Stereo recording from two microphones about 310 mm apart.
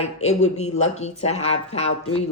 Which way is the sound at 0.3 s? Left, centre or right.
Left.